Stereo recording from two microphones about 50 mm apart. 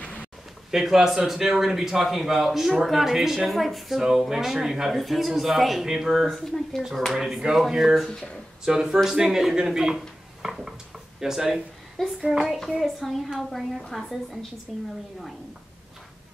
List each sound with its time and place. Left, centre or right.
0.0 s a sound: left
0.7 s speech: centre
6.3 s speech: centre
7.2 s speech: centre
10.4 s a sound: centre
11.1 s speech: centre
12.0 s a child's voice: centre